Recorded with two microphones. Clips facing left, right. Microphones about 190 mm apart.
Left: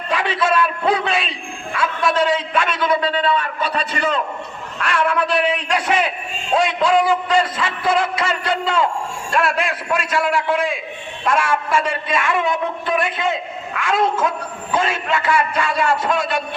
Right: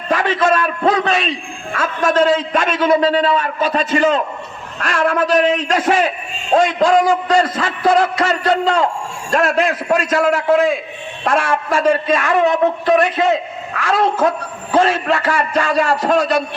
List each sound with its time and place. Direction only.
0.1 s a man's voice: 40° right (ahead or behind)